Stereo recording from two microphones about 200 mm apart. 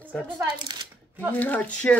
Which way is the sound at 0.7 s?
20° right (ahead or behind).